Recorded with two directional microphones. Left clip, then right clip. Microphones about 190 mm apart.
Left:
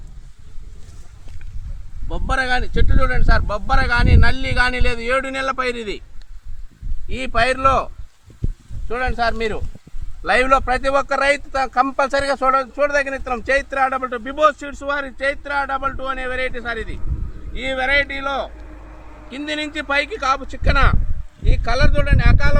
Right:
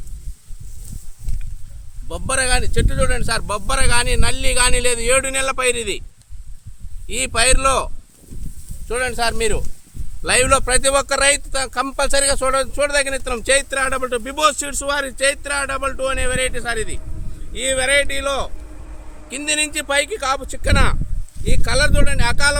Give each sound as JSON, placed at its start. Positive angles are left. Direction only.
{"t": 2.0, "sound": "speech", "side_deg": -35}
{"t": 7.1, "sound": "speech", "side_deg": -50}
{"t": 8.9, "sound": "a man's voice", "side_deg": -55}
{"t": 18.5, "sound": "a sound", "side_deg": 10}
{"t": 19.3, "sound": "a man's voice", "side_deg": -40}
{"t": 19.8, "sound": "speech", "side_deg": -65}